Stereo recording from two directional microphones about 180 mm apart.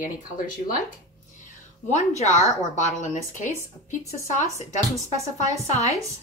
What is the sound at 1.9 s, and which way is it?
A woman's voice, 40° left (ahead or behind).